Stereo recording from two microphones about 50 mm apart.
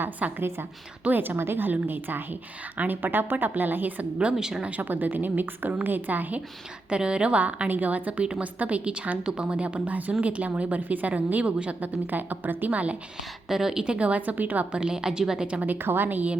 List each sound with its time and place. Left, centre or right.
0.2 s a woman's voice: right
4.2 s a woman's voice: centre
4.6 s a woman's voice: right
6.9 s a woman's voice: right
12.1 s a woman's voice: right
13.5 s a woman's voice: centre; by 14.8 s right
14.8 s a woman's voice: centre
15.6 s a woman's voice: right